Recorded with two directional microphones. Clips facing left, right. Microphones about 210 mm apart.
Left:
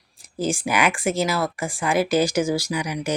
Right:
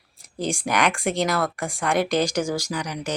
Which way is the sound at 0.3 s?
5° left (ahead or behind).